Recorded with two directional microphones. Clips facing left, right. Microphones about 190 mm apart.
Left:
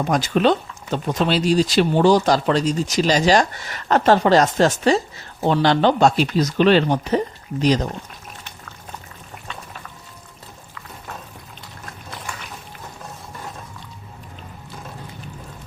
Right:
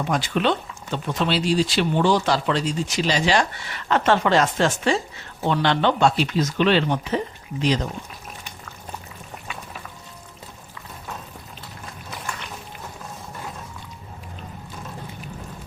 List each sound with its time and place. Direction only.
0.0 s speech: 40° left (ahead or behind)
9.5 s music: 10° right (ahead or behind)